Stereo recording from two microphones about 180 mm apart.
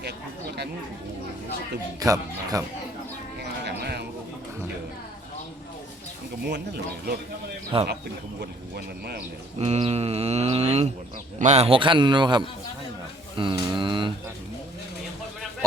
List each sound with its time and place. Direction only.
2.0 s a man's voice: 20° right (ahead or behind)
3.6 s sheep: 65° right (ahead or behind)
7.7 s speech: 30° right (ahead or behind)
8.4 s speech: 65° right (ahead or behind)
9.6 s a man's voice: 35° right (ahead or behind)